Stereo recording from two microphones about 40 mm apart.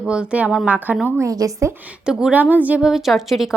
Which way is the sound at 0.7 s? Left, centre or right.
Right.